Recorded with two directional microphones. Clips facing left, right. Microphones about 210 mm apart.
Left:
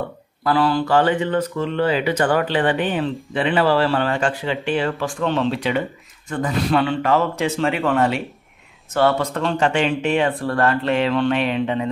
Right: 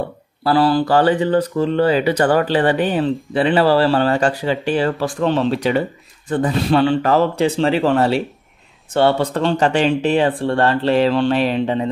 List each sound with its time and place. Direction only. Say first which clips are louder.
0.4 s speech: right 3 dB; 35° right (ahead or behind)